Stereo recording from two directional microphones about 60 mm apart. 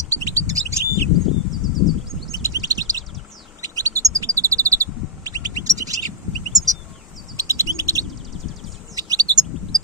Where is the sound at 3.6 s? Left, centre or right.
Right.